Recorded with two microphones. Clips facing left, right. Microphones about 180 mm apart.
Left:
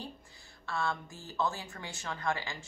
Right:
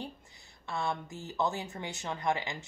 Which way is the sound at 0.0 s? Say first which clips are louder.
Right 2 dB; 20° right (ahead or behind).